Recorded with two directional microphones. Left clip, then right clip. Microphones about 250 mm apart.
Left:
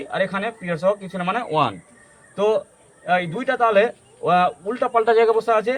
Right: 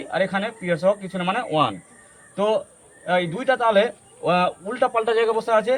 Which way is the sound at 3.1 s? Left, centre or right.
Centre.